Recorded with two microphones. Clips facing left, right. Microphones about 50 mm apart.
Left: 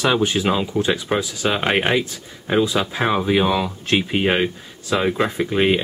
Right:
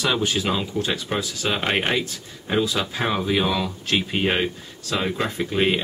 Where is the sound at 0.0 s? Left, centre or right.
Centre.